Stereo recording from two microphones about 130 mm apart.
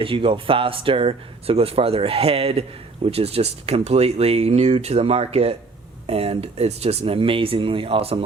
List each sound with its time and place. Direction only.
0.0 s speech: 45° right (ahead or behind)